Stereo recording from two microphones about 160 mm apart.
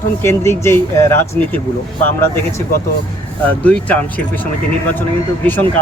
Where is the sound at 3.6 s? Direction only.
10° left (ahead or behind).